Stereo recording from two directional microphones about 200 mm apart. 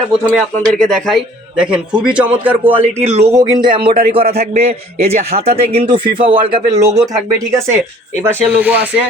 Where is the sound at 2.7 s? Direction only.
30° right (ahead or behind).